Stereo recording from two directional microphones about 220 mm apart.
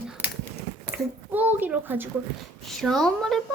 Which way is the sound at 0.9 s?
10° right (ahead or behind).